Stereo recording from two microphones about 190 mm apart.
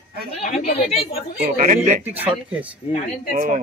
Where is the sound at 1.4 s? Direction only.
45° right (ahead or behind).